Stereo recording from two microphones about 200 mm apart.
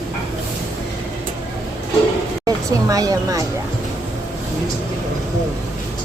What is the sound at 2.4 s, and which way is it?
Speech, 15° right (ahead or behind).